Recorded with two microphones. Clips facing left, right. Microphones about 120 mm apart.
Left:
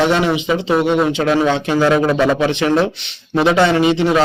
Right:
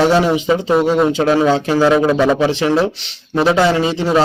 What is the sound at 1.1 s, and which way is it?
Speech, 40° right (ahead or behind).